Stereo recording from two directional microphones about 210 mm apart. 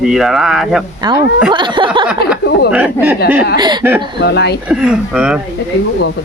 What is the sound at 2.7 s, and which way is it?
Speech, 5° right (ahead or behind).